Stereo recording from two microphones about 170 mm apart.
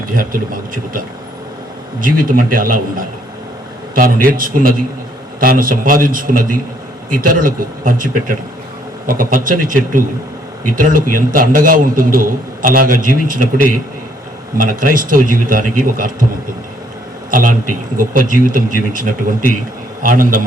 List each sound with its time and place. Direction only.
0.0 s a man's voice: 55° right (ahead or behind)
14.6 s a man's voice: 55° right (ahead or behind)
17.3 s a man's voice: 50° right (ahead or behind)